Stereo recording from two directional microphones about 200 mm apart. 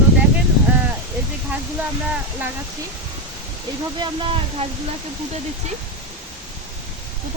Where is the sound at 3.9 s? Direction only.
25° right (ahead or behind).